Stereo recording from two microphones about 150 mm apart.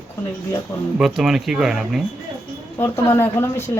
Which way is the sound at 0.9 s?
Centre (ahead or behind).